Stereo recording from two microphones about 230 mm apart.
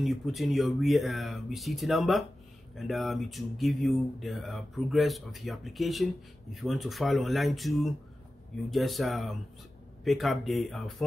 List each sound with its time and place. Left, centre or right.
0.0 s speech: centre